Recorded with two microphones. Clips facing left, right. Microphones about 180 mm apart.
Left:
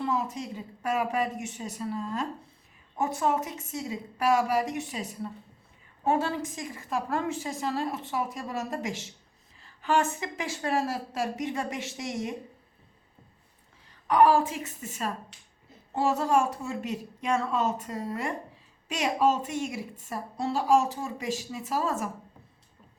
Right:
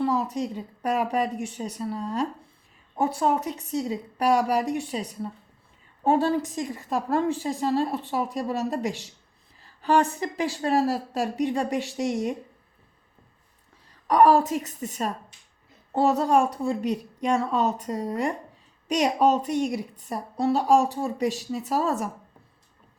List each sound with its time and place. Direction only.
0.0 s a woman's voice: 35° right (ahead or behind)
14.1 s a woman's voice: 35° right (ahead or behind)